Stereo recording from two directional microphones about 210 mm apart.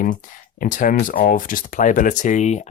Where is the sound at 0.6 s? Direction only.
40° left (ahead or behind).